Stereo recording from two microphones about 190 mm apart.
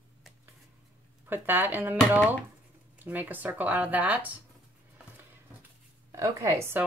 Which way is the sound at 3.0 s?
10° right (ahead or behind).